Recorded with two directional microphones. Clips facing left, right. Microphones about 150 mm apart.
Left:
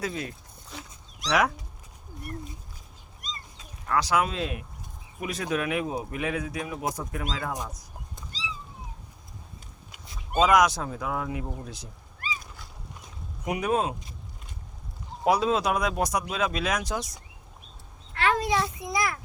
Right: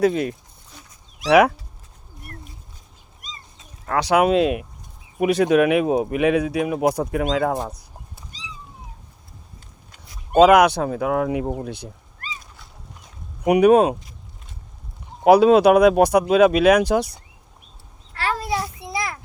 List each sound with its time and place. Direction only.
0.0 s speech: 70° right (ahead or behind)
0.7 s dog: 85° left
1.3 s speech: 65° right (ahead or behind)
3.8 s speech: 70° right (ahead or behind)
10.3 s speech: 65° right (ahead or behind)
11.4 s speech: 60° right (ahead or behind)
13.4 s speech: 70° right (ahead or behind)
15.2 s speech: 70° right (ahead or behind)
18.1 s a sound: 35° right (ahead or behind)